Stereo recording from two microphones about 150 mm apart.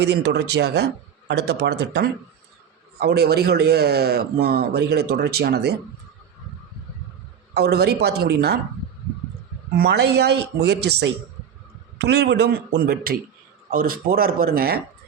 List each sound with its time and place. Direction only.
0.0 s speech: 90° right
7.5 s speech: 90° right
9.7 s speech: 90° right
11.9 s speech: 90° right
13.7 s speech: 70° right (ahead or behind); by 14.8 s 85° right